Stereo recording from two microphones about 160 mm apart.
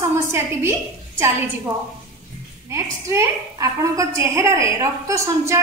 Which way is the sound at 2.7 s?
20° right (ahead or behind).